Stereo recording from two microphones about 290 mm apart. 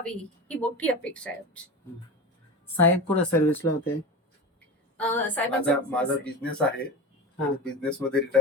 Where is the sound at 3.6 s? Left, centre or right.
Left.